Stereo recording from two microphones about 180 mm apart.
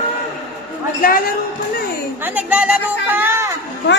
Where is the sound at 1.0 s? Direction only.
50° left (ahead or behind).